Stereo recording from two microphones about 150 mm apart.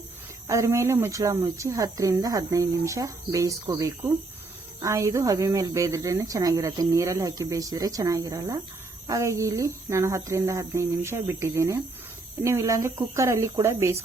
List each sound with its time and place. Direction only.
0.4 s speech: 20° right (ahead or behind)